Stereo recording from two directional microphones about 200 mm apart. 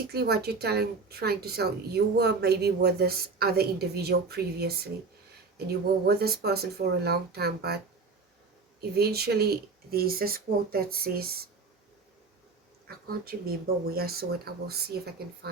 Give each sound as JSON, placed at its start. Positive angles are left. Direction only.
{"t": 0.1, "sound": "speech", "side_deg": -50}
{"t": 8.8, "sound": "speech", "side_deg": -50}
{"t": 12.9, "sound": "speech", "side_deg": -50}